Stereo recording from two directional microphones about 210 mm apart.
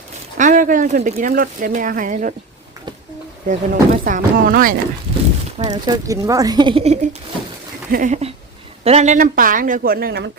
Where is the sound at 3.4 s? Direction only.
40° right (ahead or behind).